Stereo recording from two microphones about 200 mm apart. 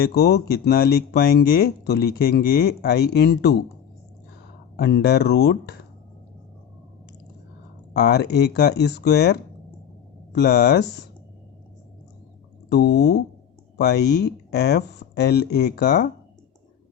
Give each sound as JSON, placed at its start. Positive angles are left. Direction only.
{"t": 0.0, "sound": "speech", "side_deg": 55}
{"t": 4.8, "sound": "speech", "side_deg": 55}
{"t": 7.9, "sound": "speech", "side_deg": 55}
{"t": 12.6, "sound": "speech", "side_deg": 55}